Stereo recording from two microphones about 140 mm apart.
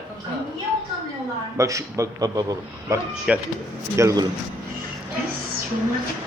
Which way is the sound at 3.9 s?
25° right (ahead or behind).